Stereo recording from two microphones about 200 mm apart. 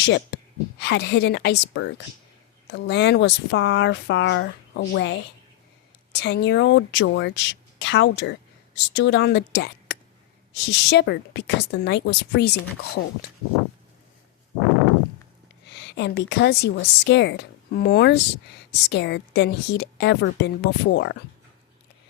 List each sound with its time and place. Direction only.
0.0 s a woman's voice: 60° left (ahead or behind)
15.8 s speech: 60° left (ahead or behind)